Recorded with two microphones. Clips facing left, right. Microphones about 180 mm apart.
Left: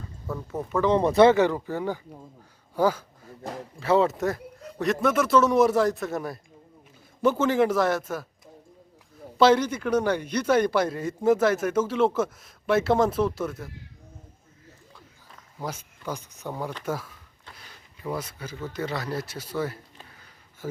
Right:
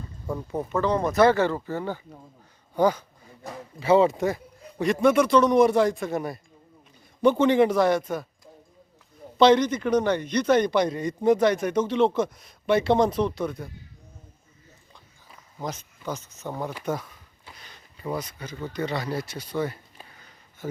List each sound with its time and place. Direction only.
0.5 s a man's voice: 5° left (ahead or behind)
0.8 s a man's voice: 25° left (ahead or behind); by 8.3 s 5° left (ahead or behind)
9.4 s a man's voice: 5° left (ahead or behind)
14.9 s a sound: 5° left (ahead or behind)
16.8 s a man's voice: 5° left (ahead or behind)
18.2 s a man's voice: 5° left (ahead or behind)